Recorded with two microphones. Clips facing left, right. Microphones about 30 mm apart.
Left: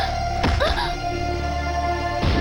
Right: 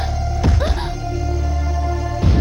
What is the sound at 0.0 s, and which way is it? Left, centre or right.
Music, left.